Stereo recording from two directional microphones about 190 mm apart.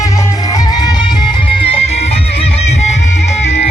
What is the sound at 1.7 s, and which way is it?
Music, 35° left (ahead or behind).